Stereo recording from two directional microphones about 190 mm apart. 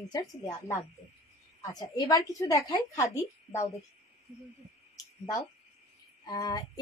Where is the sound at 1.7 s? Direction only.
20° left (ahead or behind).